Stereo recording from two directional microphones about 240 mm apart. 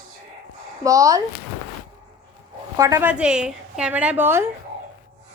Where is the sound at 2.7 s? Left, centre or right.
Centre.